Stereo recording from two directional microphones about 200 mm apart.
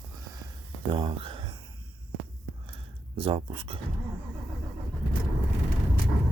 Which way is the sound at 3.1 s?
25° right (ahead or behind).